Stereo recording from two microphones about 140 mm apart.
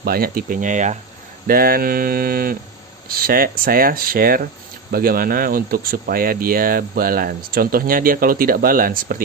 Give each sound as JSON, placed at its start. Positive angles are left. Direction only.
{"t": 0.0, "sound": "speech", "side_deg": -90}
{"t": 1.5, "sound": "speech", "side_deg": -90}